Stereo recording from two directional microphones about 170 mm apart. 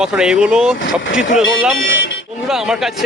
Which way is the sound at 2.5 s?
5° right (ahead or behind).